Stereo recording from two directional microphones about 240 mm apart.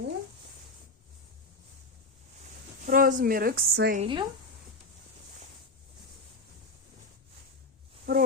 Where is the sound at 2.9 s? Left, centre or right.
Right.